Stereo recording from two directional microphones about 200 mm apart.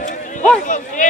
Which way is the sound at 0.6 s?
40° left (ahead or behind).